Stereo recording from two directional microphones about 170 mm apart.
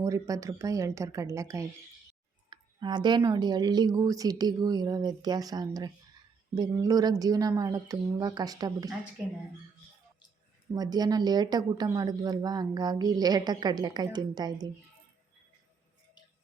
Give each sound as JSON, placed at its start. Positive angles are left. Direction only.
{"t": 0.0, "sound": "a woman's voice", "side_deg": -20}
{"t": 10.7, "sound": "a woman's voice", "side_deg": -25}